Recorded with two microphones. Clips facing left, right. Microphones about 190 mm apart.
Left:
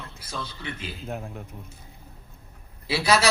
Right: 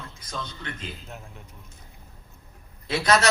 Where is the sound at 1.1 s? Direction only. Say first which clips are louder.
Left 9 dB; 55° left (ahead or behind).